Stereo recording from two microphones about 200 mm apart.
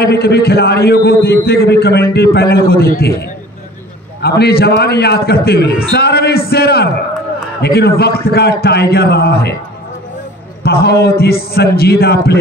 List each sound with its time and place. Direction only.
0.0 s a man's voice: 55° left (ahead or behind)
10.6 s a man's voice: 50° left (ahead or behind)